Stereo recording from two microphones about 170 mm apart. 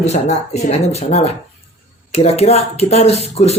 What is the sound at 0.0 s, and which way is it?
Speech, 40° left (ahead or behind).